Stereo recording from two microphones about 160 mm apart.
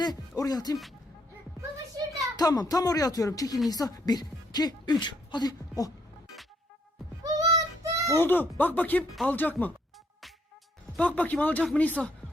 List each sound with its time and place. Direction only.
0.0 s speech: 25° left (ahead or behind)
2.3 s speech: 25° left (ahead or behind)
7.2 s child singing: 20° right (ahead or behind)
8.1 s speech: 15° left (ahead or behind)
10.9 s speech: 10° left (ahead or behind)